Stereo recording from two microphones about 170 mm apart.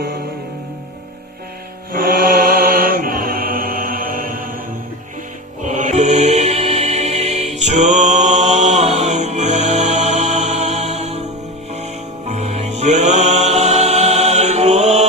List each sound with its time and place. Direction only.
1.9 s mantra: 60° right (ahead or behind)
5.6 s music: 45° right (ahead or behind)
12.3 s music: 40° right (ahead or behind)